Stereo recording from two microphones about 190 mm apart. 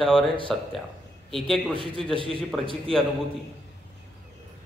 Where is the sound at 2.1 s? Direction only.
25° right (ahead or behind).